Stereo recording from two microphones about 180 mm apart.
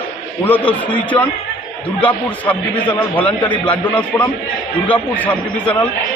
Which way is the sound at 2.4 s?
10° left (ahead or behind).